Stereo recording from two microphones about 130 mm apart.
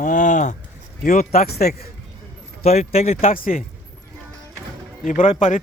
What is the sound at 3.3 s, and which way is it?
Speech, 90° left.